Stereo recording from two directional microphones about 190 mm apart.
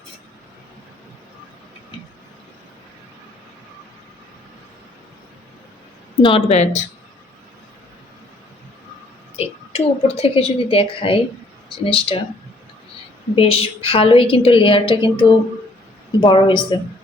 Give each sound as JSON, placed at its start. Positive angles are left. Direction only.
{"t": 6.2, "sound": "speech", "side_deg": 30}
{"t": 9.3, "sound": "a woman's voice", "side_deg": 30}
{"t": 13.3, "sound": "a woman's voice", "side_deg": 30}